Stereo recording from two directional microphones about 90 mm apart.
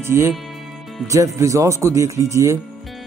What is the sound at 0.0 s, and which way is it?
Speech, 30° right (ahead or behind).